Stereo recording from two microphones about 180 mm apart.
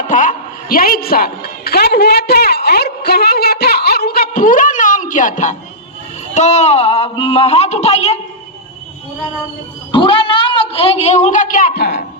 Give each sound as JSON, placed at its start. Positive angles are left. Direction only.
{"t": 0.1, "sound": "a woman's voice", "side_deg": 45}
{"t": 9.9, "sound": "a woman's voice", "side_deg": 30}